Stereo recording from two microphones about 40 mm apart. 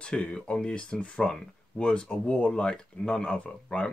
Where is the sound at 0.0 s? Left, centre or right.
Left.